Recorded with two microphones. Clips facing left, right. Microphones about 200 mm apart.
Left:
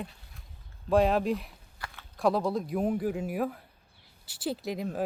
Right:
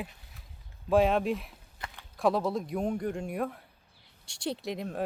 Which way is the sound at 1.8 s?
20° right (ahead or behind).